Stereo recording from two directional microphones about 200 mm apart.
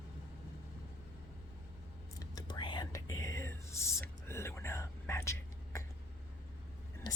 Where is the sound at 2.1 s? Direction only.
20° left (ahead or behind).